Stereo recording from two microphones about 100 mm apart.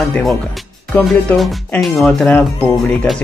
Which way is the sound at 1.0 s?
Centre (ahead or behind).